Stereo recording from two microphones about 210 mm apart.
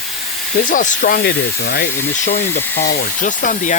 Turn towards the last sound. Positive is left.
turn(degrees=40)  # may be behind; listen again after turning